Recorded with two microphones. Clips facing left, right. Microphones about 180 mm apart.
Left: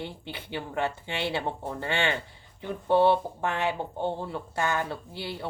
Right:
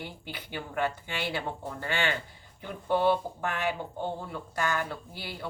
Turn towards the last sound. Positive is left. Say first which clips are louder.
# left 4 dB
turn(degrees=25)  # may be behind; listen again after turning